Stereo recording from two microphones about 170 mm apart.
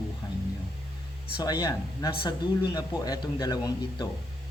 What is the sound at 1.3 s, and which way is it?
Speech, 25° left (ahead or behind).